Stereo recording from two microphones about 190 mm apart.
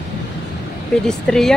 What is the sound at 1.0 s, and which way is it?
Speech, 5° left (ahead or behind).